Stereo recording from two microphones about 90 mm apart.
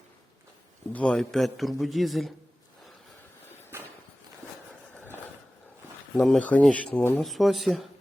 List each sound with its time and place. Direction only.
0.9 s a man's voice: 10° left (ahead or behind)
3.7 s walk: 25° right (ahead or behind)
6.1 s a man's voice: centre (ahead or behind)
6.4 s speech: 15° left (ahead or behind)
7.2 s a man's voice: centre (ahead or behind)